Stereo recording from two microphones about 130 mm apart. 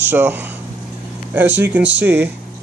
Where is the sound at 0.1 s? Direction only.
15° right (ahead or behind).